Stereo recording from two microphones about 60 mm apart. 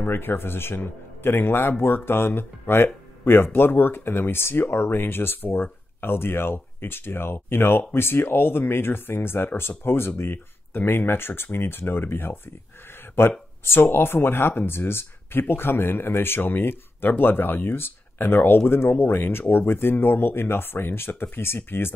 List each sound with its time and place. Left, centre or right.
0.0 s a man's voice: left